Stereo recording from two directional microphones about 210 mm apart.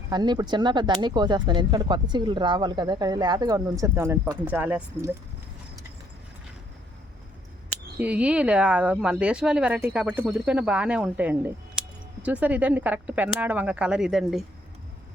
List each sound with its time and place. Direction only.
0.1 s speech: 20° right (ahead or behind)
7.9 s speech: 5° right (ahead or behind)